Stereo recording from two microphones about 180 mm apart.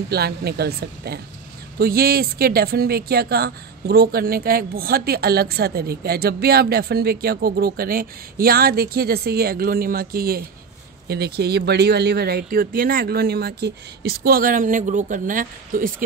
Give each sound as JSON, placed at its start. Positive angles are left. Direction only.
{"t": 0.1, "sound": "speech", "side_deg": -60}